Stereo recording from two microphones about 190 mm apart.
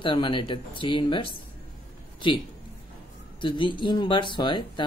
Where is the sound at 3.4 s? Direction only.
25° left (ahead or behind).